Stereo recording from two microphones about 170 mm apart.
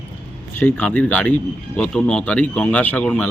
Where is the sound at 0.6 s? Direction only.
10° left (ahead or behind).